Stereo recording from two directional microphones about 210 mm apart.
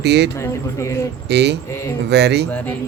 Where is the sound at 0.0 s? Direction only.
55° right (ahead or behind).